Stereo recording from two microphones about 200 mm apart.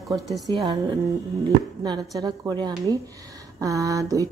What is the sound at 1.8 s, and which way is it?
Speech, 20° right (ahead or behind).